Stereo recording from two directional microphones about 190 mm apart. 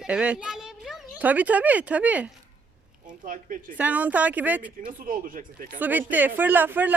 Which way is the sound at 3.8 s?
10° right (ahead or behind).